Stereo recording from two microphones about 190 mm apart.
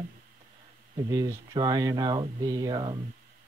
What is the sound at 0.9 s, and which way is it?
Speech, 20° right (ahead or behind).